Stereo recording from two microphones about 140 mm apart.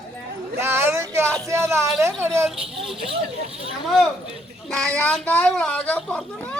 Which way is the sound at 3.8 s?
Centre (ahead or behind).